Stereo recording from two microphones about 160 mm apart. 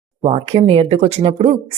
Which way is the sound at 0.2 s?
40° right (ahead or behind).